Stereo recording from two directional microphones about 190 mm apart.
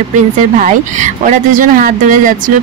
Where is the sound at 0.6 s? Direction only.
40° right (ahead or behind).